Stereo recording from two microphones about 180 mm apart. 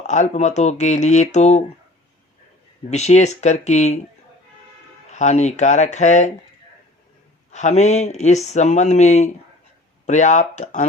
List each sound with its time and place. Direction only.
0.1 s speech: 40° left (ahead or behind)
2.9 s speech: 40° left (ahead or behind)
5.1 s speech: 40° left (ahead or behind)
7.5 s speech: 40° left (ahead or behind)